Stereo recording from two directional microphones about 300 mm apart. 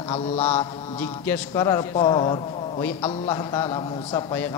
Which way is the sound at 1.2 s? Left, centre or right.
Centre.